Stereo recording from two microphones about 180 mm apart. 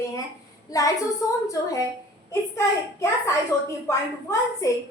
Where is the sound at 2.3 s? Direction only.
15° left (ahead or behind).